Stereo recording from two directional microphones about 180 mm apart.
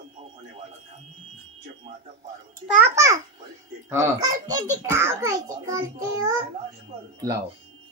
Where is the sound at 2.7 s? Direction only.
15° right (ahead or behind).